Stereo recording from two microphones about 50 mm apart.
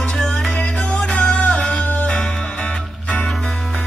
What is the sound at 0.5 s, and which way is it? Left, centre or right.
Music, left.